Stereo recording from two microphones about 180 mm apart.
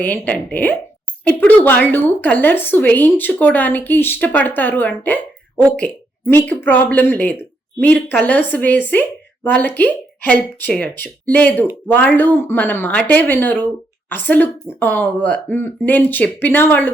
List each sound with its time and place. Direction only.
0.0 s a woman's voice: 10° left (ahead or behind)